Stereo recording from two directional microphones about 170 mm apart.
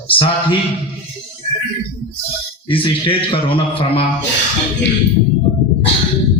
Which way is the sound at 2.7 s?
30° left (ahead or behind).